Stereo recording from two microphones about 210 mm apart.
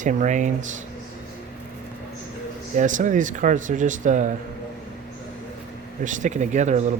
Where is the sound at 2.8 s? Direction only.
35° right (ahead or behind).